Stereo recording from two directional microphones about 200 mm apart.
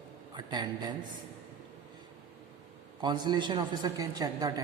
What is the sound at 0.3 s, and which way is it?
Speech, 20° right (ahead or behind).